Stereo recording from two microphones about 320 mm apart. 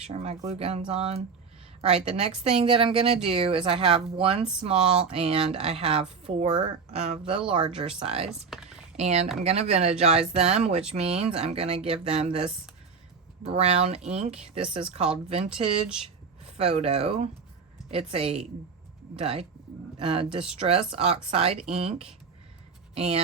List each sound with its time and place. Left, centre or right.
0.1 s a woman's voice: centre
8.5 s computer keyboard: centre
9.0 s speech: centre
16.5 s a woman's voice: centre